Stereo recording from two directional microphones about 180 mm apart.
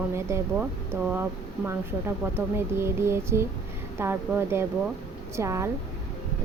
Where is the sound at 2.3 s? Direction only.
15° right (ahead or behind).